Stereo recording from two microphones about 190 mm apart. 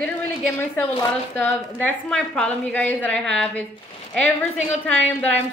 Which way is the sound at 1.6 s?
10° left (ahead or behind).